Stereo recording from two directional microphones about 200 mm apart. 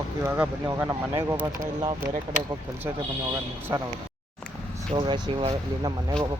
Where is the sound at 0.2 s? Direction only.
15° right (ahead or behind).